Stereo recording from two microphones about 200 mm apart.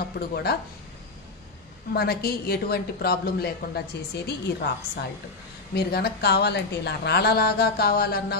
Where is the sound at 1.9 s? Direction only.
50° left (ahead or behind).